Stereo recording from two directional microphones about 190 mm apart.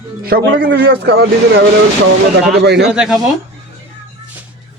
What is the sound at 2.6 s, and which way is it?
Speech, 60° right (ahead or behind).